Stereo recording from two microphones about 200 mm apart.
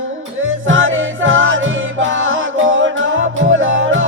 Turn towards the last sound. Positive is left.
turn(degrees=-70)  # may be behind; listen again after turning